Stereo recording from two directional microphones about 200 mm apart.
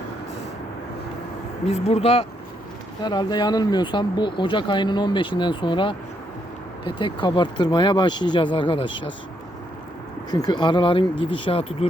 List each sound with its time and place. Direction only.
1.6 s speech: 30° left (ahead or behind)
10.3 s speech: 20° left (ahead or behind)